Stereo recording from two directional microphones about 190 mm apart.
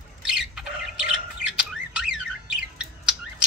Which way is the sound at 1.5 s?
5° right (ahead or behind).